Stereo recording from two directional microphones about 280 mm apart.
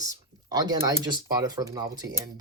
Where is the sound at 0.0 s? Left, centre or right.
Centre.